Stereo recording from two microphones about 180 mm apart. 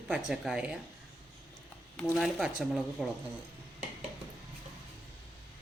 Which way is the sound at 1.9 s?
5° left (ahead or behind).